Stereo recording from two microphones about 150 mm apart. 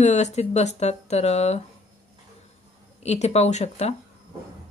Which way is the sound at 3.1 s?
45° left (ahead or behind).